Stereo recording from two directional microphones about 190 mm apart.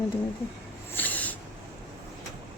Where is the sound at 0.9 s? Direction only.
10° left (ahead or behind).